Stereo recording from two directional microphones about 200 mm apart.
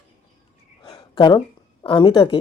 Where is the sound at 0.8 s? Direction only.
20° left (ahead or behind).